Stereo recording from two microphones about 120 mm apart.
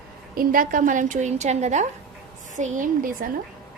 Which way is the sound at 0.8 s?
90° right.